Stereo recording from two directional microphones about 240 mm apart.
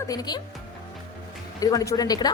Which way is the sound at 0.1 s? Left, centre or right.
Centre.